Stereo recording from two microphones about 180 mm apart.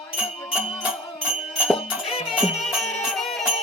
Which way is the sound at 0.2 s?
5° right (ahead or behind).